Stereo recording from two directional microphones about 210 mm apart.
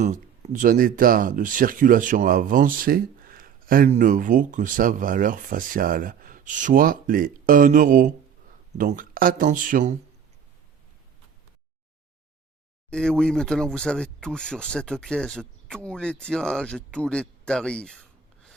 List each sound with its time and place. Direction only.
0.0 s speech: 35° right (ahead or behind)
12.9 s speech: 5° left (ahead or behind)